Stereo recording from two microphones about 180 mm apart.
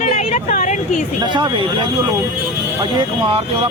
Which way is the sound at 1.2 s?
25° right (ahead or behind).